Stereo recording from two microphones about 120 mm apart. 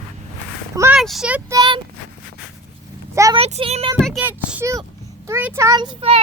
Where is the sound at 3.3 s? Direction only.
55° right (ahead or behind).